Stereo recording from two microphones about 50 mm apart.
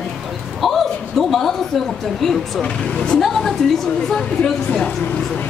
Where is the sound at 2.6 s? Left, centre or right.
Centre.